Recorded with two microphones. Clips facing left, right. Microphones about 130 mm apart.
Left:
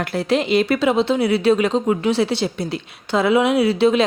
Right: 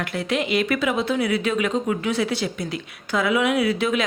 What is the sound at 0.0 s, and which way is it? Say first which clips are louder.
A woman's voice: left 5 dB; 35° left (ahead or behind).